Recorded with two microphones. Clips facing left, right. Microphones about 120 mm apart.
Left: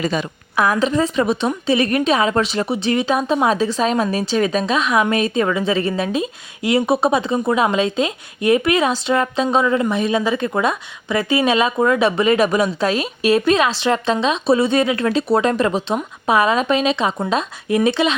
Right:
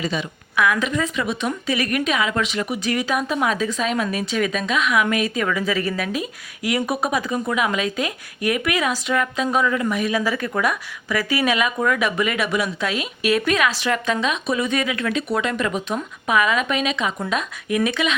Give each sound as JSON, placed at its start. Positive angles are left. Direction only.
{"t": 0.0, "sound": "a woman's voice", "side_deg": 45}